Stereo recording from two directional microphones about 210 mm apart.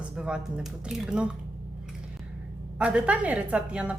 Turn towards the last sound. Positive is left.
turn(degrees=-5)  # may be behind; listen again after turning